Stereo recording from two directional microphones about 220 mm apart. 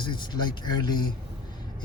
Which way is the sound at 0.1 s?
20° left (ahead or behind).